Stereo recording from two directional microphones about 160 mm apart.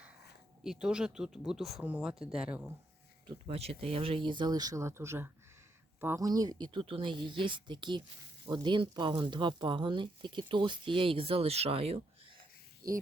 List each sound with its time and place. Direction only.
0.6 s speech: 5° right (ahead or behind)
3.2 s speech: 35° right (ahead or behind)
12.8 s speech: 25° right (ahead or behind)